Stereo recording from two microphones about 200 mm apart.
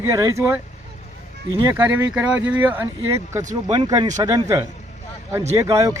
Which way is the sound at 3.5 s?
25° right (ahead or behind).